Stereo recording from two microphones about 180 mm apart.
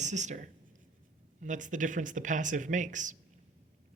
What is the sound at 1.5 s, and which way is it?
Speech, 45° right (ahead or behind).